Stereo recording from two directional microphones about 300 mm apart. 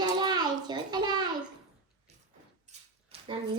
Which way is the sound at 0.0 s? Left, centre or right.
Centre.